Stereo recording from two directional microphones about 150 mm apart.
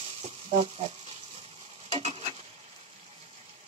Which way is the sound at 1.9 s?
40° right (ahead or behind).